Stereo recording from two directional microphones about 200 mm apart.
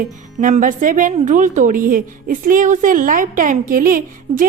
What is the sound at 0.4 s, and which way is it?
A woman's voice, 40° right (ahead or behind).